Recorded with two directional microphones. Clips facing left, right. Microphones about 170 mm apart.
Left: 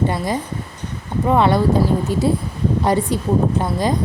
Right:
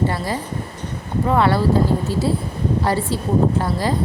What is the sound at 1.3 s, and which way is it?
A woman's voice, 20° left (ahead or behind).